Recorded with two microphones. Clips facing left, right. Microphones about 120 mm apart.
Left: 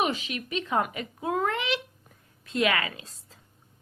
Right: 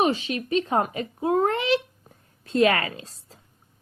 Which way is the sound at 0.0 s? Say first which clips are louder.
Right 5 dB; 35° right (ahead or behind).